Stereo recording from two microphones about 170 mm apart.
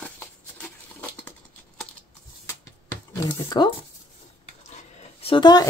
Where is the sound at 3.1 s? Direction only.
25° left (ahead or behind).